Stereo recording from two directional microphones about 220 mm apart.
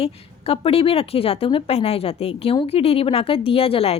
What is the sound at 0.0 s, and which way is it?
A woman's voice, 25° left (ahead or behind).